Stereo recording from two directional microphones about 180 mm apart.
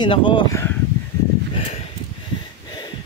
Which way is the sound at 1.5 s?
35° left (ahead or behind).